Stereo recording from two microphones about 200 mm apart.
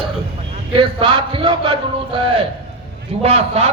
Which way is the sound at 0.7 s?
25° right (ahead or behind).